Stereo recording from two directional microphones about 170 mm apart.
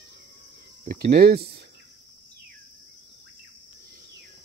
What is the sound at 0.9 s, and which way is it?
Speech, 65° right (ahead or behind).